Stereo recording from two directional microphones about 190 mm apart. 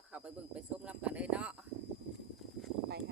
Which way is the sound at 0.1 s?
5° right (ahead or behind).